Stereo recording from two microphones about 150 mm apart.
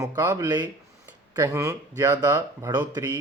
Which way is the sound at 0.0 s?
20° right (ahead or behind).